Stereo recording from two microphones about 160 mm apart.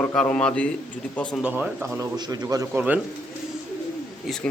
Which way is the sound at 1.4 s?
10° right (ahead or behind).